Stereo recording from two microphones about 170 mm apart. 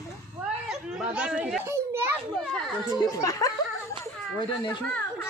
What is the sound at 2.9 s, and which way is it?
Speech, 20° left (ahead or behind).